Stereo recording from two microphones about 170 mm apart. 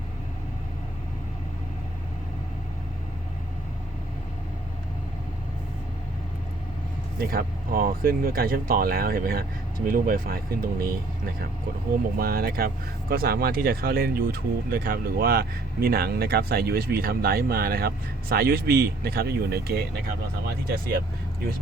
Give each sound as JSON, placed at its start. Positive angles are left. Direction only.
{"t": 7.2, "sound": "speech", "side_deg": -60}
{"t": 12.1, "sound": "speech", "side_deg": -65}